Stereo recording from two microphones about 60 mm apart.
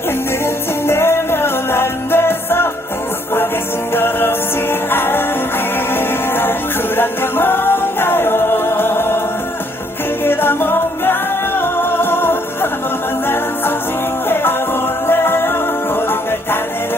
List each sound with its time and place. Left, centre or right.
0.9 s music: left
3.9 s music: left
6.9 s music: left
10.2 s music: left
15.0 s music: left